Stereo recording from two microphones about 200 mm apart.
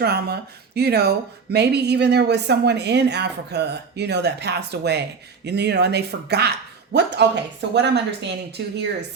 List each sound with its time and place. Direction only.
0.0 s speech: 55° right (ahead or behind)